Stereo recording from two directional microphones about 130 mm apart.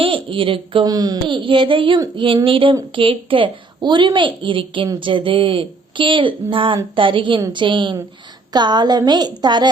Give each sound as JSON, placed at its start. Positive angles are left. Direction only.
{"t": 0.0, "sound": "speech", "side_deg": -40}
{"t": 0.9, "sound": "speech", "side_deg": -30}